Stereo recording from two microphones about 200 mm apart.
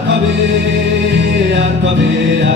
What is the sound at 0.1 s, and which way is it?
Music, 60° right (ahead or behind).